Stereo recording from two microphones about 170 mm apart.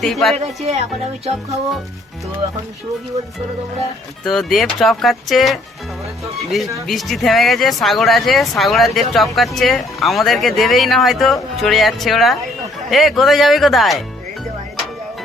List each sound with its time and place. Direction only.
0.0 s speech: centre (ahead or behind)
0.3 s speech: 40° right (ahead or behind)
4.2 s speech: centre (ahead or behind)
6.8 s speech: centre (ahead or behind)